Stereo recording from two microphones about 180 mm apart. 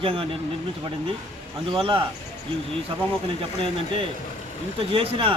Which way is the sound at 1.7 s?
30° right (ahead or behind).